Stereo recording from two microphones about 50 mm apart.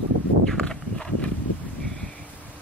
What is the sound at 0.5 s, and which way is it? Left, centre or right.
Walk, centre.